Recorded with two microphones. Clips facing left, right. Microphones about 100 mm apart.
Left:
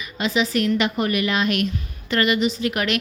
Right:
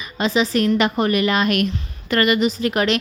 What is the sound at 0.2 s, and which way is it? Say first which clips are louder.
A woman's voice: right 3 dB; 35° right (ahead or behind).